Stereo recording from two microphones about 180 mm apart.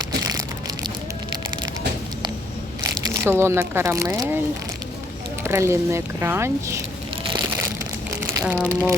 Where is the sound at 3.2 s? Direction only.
15° right (ahead or behind).